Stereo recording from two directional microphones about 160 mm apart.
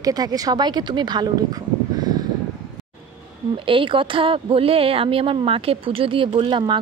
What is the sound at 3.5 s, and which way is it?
A woman's voice, 30° right (ahead or behind).